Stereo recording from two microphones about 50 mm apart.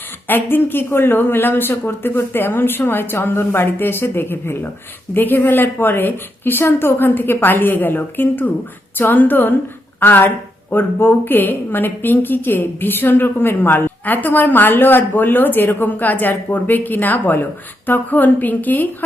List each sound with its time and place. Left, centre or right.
0.3 s a woman's voice: left
15.9 s a woman's voice: left